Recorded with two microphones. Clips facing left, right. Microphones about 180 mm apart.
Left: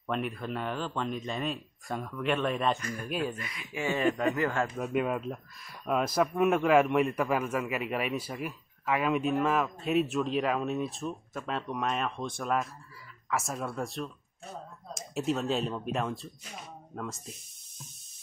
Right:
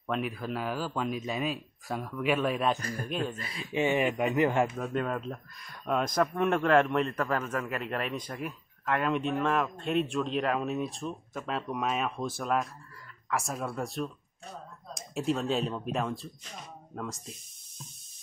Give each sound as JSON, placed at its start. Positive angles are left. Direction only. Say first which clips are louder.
{"t": 0.0, "sound": "speech", "louder": "even", "side_deg": 0}
{"t": 2.8, "sound": "speech", "louder": "right 1 dB", "side_deg": -35}
{"t": 3.1, "sound": "speech", "louder": "left 1 dB", "side_deg": 5}
{"t": 3.3, "sound": "a man's voice", "louder": "right 6 dB", "side_deg": -30}
{"t": 4.7, "sound": "speech", "louder": "left 2 dB", "side_deg": 5}